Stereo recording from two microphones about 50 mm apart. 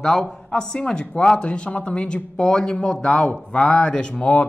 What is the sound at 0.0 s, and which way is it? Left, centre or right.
Speech, centre.